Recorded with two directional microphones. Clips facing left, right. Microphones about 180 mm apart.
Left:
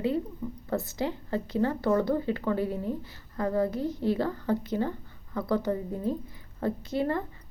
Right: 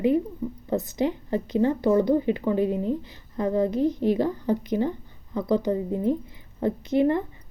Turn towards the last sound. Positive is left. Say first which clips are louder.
# right 7 dB
turn(degrees=-20)  # may be behind; listen again after turning